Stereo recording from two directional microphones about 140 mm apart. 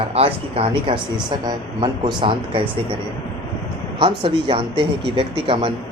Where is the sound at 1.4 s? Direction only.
30° right (ahead or behind).